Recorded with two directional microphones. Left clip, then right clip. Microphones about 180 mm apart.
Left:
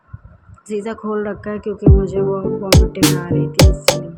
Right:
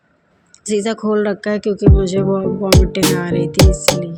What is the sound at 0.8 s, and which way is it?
Speech, 40° right (ahead or behind).